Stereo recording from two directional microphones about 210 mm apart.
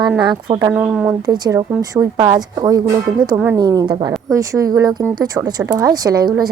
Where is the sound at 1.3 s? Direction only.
15° right (ahead or behind).